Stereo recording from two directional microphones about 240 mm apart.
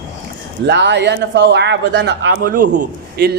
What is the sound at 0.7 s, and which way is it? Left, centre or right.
Speech, right.